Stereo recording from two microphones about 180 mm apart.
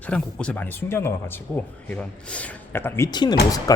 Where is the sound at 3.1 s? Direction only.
25° left (ahead or behind).